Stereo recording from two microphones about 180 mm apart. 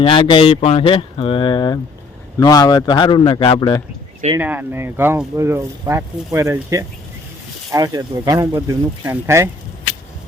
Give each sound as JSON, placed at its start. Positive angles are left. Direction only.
{"t": 0.0, "sound": "speech", "side_deg": 30}
{"t": 4.4, "sound": "speech", "side_deg": -10}